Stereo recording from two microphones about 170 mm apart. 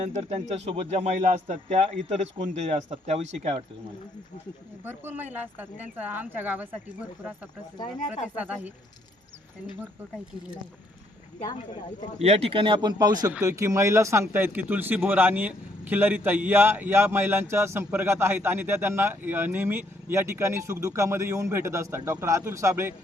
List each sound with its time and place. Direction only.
0.0 s speech: 40° right (ahead or behind)
4.8 s speech: 10° right (ahead or behind)
8.4 s speech: 10° right (ahead or behind)
12.2 s speech: 35° right (ahead or behind); by 23.0 s 15° right (ahead or behind)